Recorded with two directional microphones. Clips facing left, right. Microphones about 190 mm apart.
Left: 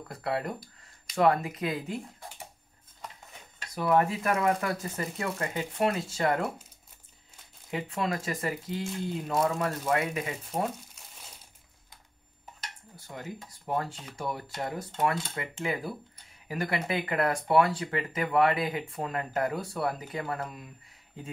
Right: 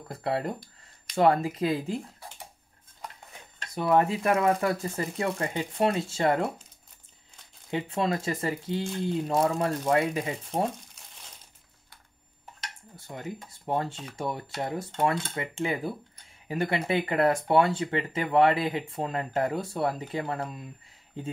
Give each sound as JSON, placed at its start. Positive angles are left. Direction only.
{"t": 0.1, "sound": "speech", "side_deg": -30}
{"t": 3.7, "sound": "speech", "side_deg": -25}
{"t": 7.7, "sound": "speech", "side_deg": -30}
{"t": 12.9, "sound": "speech", "side_deg": -25}